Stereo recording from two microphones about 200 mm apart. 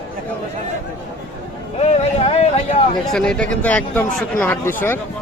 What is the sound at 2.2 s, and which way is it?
Speech, 30° left (ahead or behind).